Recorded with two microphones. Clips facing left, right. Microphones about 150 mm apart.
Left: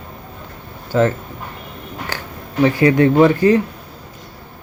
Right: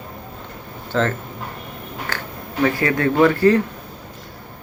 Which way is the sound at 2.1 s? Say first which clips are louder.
Even; 15° left (ahead or behind).